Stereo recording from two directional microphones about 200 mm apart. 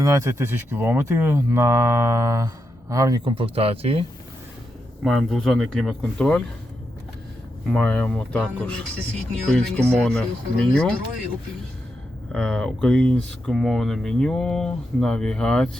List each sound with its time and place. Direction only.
0.0 s speech: 15° right (ahead or behind)
5.0 s speech: centre (ahead or behind)
7.7 s speech: 5° left (ahead or behind)
12.3 s speech: 5° left (ahead or behind)